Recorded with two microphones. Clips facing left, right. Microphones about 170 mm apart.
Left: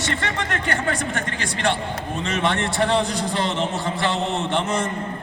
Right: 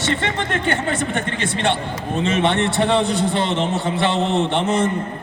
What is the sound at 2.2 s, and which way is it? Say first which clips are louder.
A man's voice: right 5 dB; 20° right (ahead or behind).